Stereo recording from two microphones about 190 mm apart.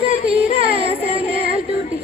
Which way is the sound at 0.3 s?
30° right (ahead or behind).